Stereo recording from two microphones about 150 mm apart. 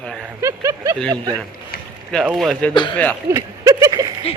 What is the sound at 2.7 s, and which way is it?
Speech, 30° left (ahead or behind).